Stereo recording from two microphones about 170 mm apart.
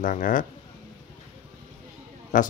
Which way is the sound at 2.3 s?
50° left (ahead or behind).